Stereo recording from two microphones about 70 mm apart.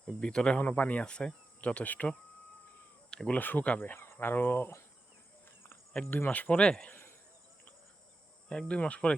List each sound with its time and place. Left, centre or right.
0.2 s speech: centre
3.1 s insect: centre
3.3 s speech: left
3.9 s speech: left
6.1 s speech: left
8.4 s speech: centre